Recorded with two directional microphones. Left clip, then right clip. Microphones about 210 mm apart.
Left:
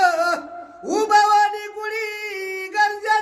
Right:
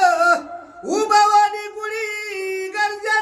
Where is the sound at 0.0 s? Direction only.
15° left (ahead or behind).